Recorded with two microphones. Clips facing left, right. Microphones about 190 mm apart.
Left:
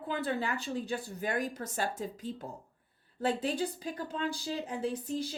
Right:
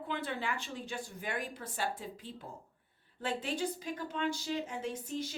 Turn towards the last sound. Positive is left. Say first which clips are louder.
# left 3 dB
turn(degrees=35)  # may be behind; listen again after turning